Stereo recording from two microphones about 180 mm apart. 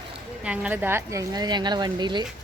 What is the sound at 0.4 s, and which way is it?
A woman's voice, 5° right (ahead or behind).